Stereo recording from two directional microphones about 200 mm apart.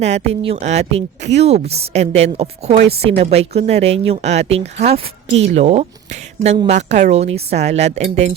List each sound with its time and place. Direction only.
0.0 s a woman's voice: 35° right (ahead or behind)